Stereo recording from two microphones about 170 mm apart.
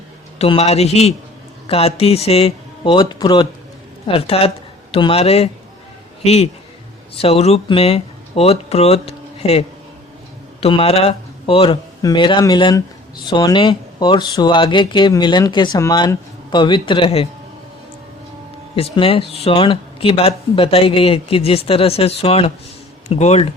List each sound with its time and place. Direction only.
0.3 s a woman's voice: 35° left (ahead or behind)
18.8 s speech: 35° left (ahead or behind)